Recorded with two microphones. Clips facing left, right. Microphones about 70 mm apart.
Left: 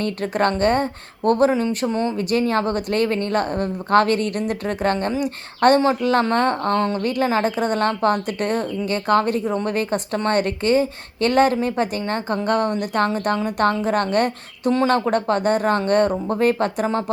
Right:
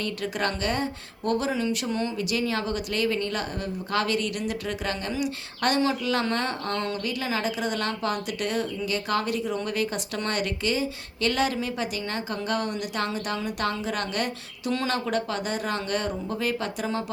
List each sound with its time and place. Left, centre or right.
0.0 s a woman's voice: left